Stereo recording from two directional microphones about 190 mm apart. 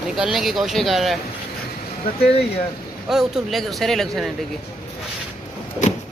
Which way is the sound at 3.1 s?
Centre (ahead or behind).